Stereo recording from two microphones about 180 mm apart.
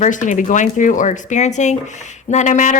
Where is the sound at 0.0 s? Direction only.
45° left (ahead or behind).